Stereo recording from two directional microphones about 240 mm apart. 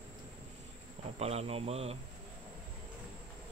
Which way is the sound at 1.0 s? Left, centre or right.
Right.